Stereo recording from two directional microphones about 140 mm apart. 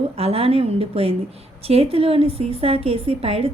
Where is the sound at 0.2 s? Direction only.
45° right (ahead or behind).